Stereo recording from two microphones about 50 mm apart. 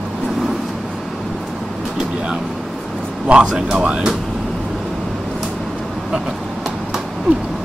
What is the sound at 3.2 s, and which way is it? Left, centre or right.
Speech, centre.